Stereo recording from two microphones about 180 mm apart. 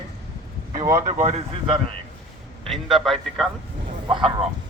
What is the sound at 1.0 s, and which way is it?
Speech, 40° right (ahead or behind).